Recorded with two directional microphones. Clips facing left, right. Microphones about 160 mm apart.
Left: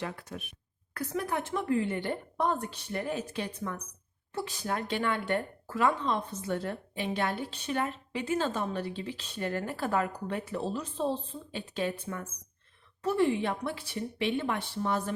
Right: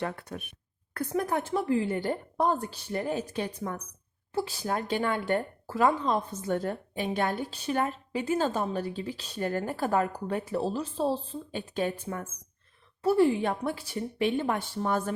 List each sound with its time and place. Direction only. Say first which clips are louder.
0.0 s speech: right 4 dB; 55° right (ahead or behind)
1.1 s a woman's voice: right 4 dB; 40° right (ahead or behind)
12.1 s a woman's voice: right 2 dB; 25° right (ahead or behind); by 15.1 s 45° right (ahead or behind)